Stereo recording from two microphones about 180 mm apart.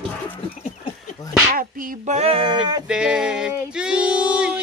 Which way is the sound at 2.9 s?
5° right (ahead or behind).